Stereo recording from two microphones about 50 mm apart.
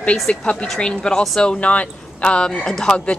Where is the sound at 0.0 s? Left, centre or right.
Centre.